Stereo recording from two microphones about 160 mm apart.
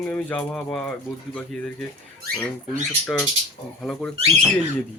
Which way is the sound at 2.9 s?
5° left (ahead or behind).